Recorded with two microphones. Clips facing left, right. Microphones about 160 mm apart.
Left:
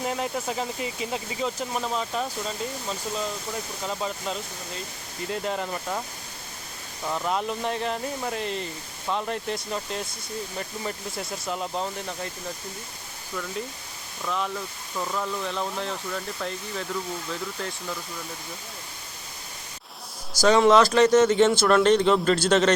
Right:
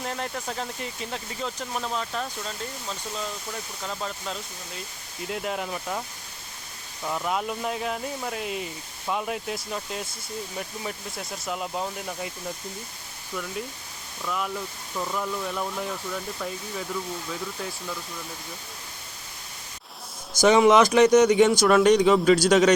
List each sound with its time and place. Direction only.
0.0 s speech: 5° left (ahead or behind)
3.8 s speech: 5° left (ahead or behind)
7.0 s speech: centre (ahead or behind)
14.3 s speech: 5° right (ahead or behind)
20.3 s speech: 20° right (ahead or behind)